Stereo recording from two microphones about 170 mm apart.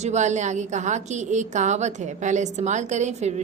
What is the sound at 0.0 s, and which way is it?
A woman's voice, 45° right (ahead or behind).